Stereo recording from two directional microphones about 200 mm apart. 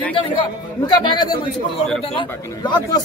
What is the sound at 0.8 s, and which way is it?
Speech, 20° left (ahead or behind).